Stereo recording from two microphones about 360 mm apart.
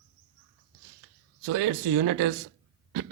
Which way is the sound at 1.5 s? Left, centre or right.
Right.